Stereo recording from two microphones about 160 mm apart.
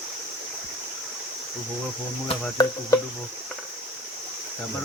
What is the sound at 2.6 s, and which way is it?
Cricket, 25° left (ahead or behind).